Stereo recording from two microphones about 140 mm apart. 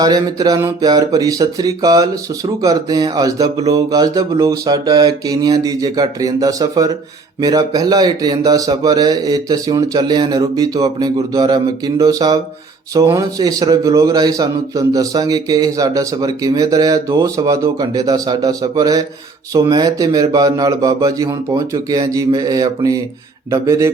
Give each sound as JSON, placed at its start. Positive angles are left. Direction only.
{"t": 0.0, "sound": "speech", "side_deg": -25}